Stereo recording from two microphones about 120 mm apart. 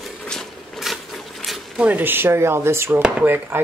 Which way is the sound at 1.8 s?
15° right (ahead or behind).